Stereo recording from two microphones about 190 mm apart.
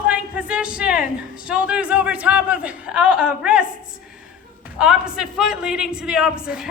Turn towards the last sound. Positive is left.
turn(degrees=-5)  # may be behind; listen again after turning